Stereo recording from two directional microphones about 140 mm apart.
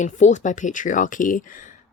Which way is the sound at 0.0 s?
60° left (ahead or behind).